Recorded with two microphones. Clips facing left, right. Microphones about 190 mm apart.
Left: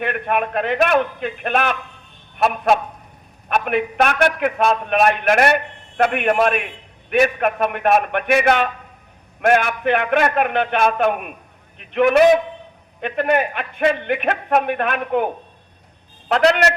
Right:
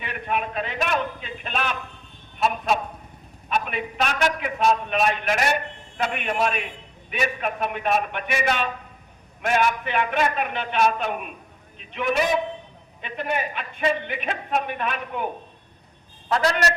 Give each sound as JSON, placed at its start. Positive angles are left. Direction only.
{"t": 0.0, "sound": "a man's voice", "side_deg": 60}
{"t": 16.3, "sound": "a man's voice", "side_deg": 70}